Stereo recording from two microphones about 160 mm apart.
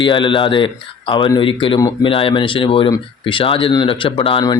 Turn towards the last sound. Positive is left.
turn(degrees=30)  # may be behind; listen again after turning